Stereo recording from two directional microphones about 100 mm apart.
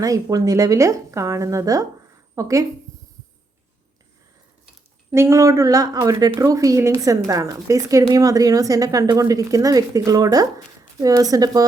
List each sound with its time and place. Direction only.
0.0 s speech: 35° right (ahead or behind)
5.1 s speech: 25° right (ahead or behind)